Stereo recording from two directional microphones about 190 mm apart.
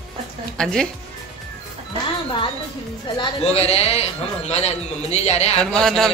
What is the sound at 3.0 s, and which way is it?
Speech, 30° left (ahead or behind).